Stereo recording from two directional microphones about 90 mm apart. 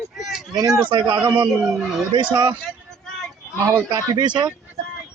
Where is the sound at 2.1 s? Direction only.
60° right (ahead or behind).